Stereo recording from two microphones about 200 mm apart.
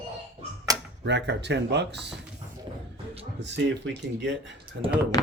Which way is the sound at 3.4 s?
65° right (ahead or behind).